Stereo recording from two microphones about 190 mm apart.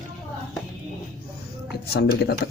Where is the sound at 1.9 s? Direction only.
60° left (ahead or behind).